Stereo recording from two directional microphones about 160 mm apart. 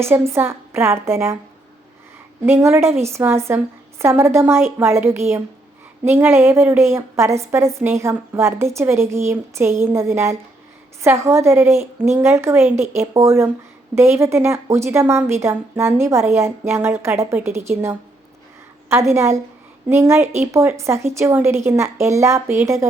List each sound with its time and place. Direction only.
0.0 s a woman's voice: 15° right (ahead or behind)
2.5 s a woman's voice: 15° right (ahead or behind)